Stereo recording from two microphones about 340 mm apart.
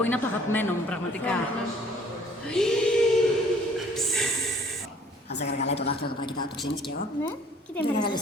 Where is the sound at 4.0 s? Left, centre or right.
Centre.